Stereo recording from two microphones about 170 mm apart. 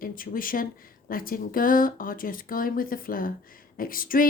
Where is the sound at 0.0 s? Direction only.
55° left (ahead or behind).